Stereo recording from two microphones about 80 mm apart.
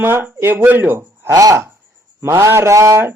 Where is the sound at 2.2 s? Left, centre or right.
Right.